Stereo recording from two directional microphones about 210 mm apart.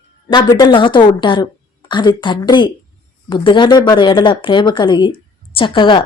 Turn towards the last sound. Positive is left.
turn(degrees=25)  # may be behind; listen again after turning